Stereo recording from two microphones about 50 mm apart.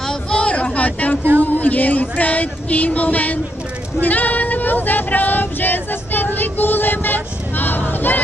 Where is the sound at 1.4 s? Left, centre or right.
Left.